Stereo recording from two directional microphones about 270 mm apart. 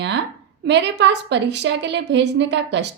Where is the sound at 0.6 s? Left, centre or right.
Right.